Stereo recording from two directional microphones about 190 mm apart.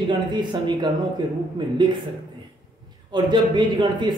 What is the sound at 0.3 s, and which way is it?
A man's voice, 25° right (ahead or behind).